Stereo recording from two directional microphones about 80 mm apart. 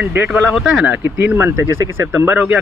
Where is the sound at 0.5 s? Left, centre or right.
Centre.